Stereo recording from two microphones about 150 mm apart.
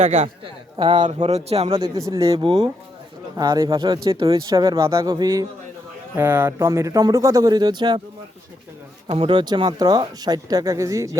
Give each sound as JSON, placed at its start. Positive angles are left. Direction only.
{"t": 0.0, "sound": "speech", "side_deg": -50}
{"t": 3.3, "sound": "speech", "side_deg": -25}
{"t": 6.1, "sound": "speech", "side_deg": -15}
{"t": 9.0, "sound": "speech", "side_deg": -35}